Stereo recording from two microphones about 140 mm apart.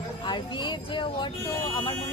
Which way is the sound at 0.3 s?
35° left (ahead or behind).